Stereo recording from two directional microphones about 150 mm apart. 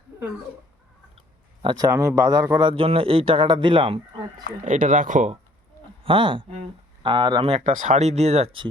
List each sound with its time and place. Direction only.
1.6 s speech: 25° right (ahead or behind)
4.6 s speech: 60° right (ahead or behind)
6.0 s speech: 35° right (ahead or behind)
7.6 s speech: 50° right (ahead or behind)